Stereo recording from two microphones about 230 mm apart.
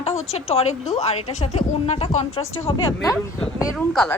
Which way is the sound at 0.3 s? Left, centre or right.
Left.